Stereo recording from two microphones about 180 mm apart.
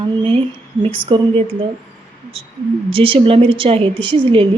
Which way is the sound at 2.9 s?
30° right (ahead or behind).